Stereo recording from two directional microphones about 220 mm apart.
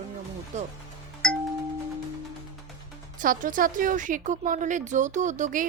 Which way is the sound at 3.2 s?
35° right (ahead or behind).